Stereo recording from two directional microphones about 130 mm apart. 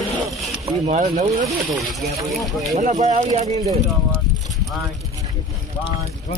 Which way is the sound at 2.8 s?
70° right (ahead or behind).